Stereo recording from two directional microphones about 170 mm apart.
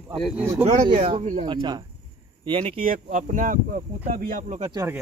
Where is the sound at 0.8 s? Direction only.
45° right (ahead or behind).